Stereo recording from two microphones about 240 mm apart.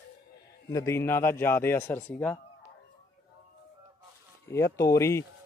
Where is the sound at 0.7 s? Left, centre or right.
Centre.